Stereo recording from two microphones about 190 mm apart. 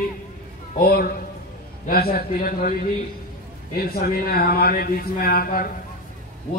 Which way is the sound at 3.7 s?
55° left (ahead or behind).